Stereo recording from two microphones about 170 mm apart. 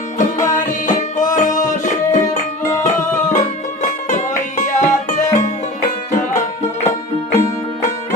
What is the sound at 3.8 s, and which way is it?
Music, 45° left (ahead or behind).